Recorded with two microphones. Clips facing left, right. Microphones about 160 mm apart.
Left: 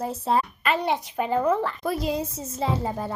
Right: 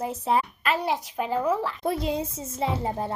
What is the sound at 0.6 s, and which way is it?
A child's voice, centre (ahead or behind).